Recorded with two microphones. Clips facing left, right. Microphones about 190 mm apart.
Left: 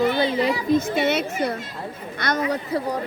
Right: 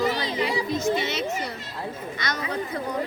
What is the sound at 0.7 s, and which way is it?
A woman's voice, 55° left (ahead or behind).